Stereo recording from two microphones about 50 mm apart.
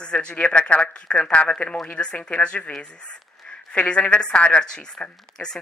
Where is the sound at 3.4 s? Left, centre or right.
Left.